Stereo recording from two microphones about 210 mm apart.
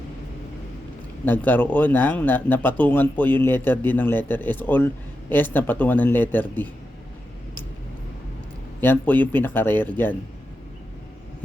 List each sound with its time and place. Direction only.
1.2 s speech: 10° left (ahead or behind)
8.8 s speech: 10° left (ahead or behind)